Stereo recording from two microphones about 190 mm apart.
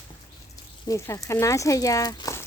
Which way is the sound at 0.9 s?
15° left (ahead or behind).